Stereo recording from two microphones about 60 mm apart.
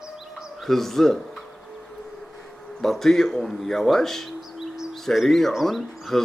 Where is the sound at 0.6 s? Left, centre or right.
Centre.